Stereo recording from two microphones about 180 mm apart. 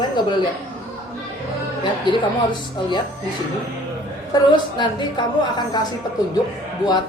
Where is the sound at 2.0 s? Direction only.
25° left (ahead or behind).